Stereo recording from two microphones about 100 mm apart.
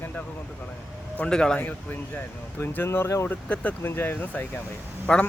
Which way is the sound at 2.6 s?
20° left (ahead or behind).